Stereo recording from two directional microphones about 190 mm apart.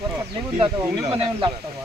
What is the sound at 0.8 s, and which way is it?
Speech, 10° right (ahead or behind).